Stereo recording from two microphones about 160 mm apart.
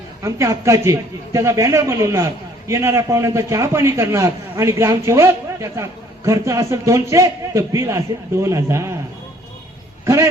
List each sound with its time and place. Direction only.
0.2 s a man's voice: 20° right (ahead or behind)